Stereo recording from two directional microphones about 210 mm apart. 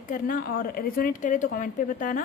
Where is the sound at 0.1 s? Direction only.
40° left (ahead or behind).